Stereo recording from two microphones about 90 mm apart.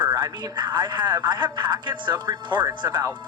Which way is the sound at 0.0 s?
50° right (ahead or behind).